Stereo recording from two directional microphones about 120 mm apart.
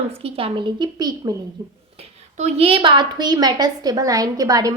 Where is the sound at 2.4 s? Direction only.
50° right (ahead or behind).